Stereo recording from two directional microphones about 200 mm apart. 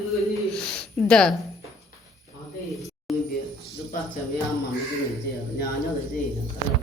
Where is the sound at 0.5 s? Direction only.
5° left (ahead or behind).